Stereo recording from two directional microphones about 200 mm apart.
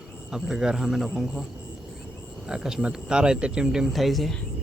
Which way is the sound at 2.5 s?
5° right (ahead or behind).